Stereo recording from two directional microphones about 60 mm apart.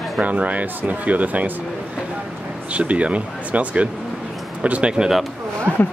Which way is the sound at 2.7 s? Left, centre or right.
Right.